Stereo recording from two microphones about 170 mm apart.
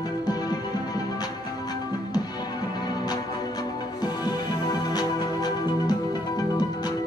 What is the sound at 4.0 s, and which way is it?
Music, 25° left (ahead or behind).